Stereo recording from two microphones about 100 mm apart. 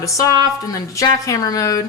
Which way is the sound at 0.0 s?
35° left (ahead or behind).